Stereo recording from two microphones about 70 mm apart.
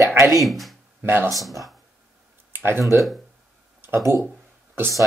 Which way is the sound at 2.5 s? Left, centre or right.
Right.